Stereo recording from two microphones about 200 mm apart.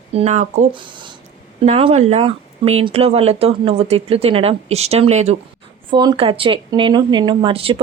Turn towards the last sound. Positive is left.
turn(degrees=-30)  # may be behind; listen again after turning